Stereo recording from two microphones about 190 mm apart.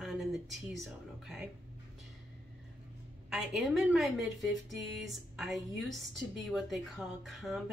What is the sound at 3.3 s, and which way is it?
A woman's voice, 5° right (ahead or behind).